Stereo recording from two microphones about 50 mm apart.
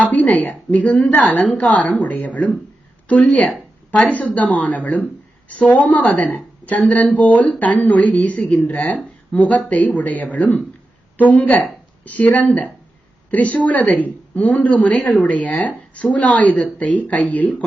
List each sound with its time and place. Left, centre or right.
0.0 s a woman's voice: left